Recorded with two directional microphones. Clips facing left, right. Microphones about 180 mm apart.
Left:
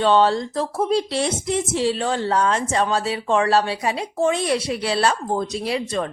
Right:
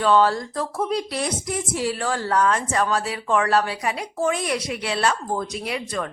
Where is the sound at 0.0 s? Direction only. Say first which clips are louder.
Left 2 dB; 25° left (ahead or behind).